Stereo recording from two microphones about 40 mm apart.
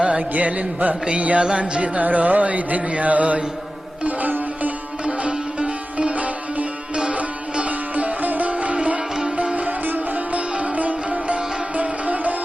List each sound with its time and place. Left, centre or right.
0.0 s music: right
1.4 s music: right
4.0 s sitar: right
5.0 s sitar: right
7.7 s music: right
9.6 s music: right
10.2 s sitar: right